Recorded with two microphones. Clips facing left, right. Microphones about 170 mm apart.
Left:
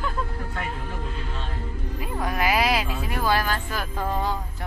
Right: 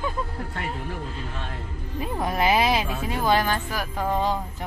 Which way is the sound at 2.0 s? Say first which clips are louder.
Right 2 dB; 25° right (ahead or behind).